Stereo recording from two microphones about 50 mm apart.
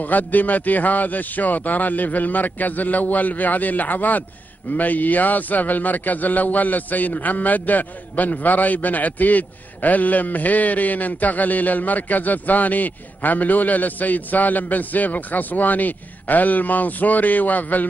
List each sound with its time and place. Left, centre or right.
0.0 s a man's voice: left